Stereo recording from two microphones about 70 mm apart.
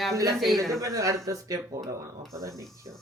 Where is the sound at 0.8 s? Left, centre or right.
Right.